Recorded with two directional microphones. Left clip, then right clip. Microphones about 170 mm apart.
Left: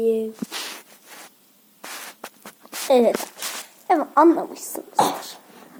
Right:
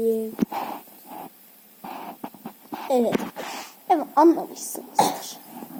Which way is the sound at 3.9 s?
20° left (ahead or behind).